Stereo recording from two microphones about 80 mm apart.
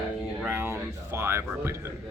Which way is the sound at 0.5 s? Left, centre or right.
Right.